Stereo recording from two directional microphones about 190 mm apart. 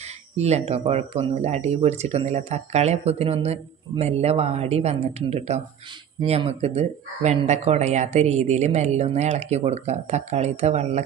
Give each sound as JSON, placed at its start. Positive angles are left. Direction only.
{"t": 0.3, "sound": "speech", "side_deg": -35}